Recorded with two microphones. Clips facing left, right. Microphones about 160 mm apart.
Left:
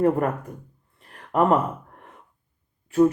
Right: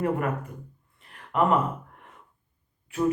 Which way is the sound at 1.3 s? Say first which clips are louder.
Left 4 dB; 40° left (ahead or behind).